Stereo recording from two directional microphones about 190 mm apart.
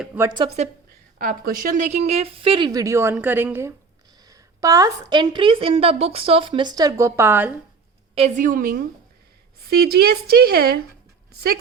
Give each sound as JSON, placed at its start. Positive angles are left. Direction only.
{"t": 0.0, "sound": "a woman's voice", "side_deg": -10}
{"t": 0.3, "sound": "a woman's voice", "side_deg": -30}
{"t": 1.2, "sound": "a woman's voice", "side_deg": -45}
{"t": 8.1, "sound": "a woman's voice", "side_deg": -35}